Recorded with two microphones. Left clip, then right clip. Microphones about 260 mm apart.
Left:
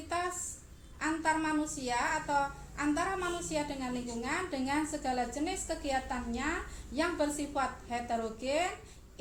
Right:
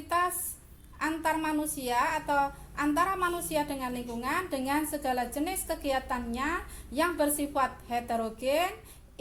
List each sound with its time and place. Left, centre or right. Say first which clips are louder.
0.9 s a woman's voice: right 2 dB; right